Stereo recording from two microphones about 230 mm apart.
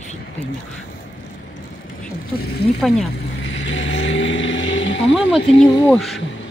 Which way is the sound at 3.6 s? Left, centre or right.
Left.